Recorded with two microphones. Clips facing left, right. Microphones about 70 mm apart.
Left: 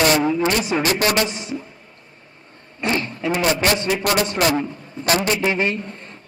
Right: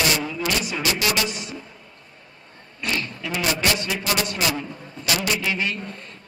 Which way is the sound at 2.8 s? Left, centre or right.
Left.